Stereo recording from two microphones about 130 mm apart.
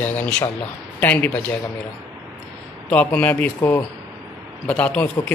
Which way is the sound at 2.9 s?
10° left (ahead or behind).